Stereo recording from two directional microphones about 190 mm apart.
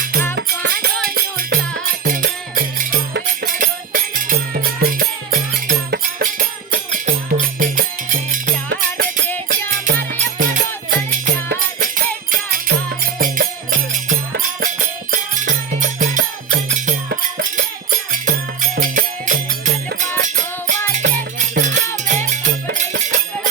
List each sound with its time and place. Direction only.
0.3 s music: 65° right (ahead or behind)
1.0 s music: 50° right (ahead or behind)
3.1 s music: 60° right (ahead or behind)
3.5 s music: 45° right (ahead or behind)
17.1 s music: 55° right (ahead or behind)